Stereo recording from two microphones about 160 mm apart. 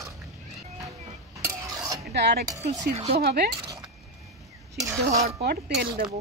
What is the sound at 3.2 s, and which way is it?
Cutlery, 90° right.